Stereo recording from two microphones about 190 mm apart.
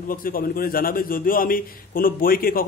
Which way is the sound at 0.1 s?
50° left (ahead or behind).